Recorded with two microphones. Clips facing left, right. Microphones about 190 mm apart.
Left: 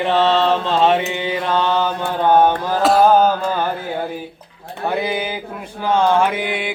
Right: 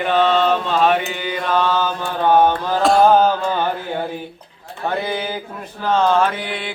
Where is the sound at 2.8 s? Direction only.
5° left (ahead or behind).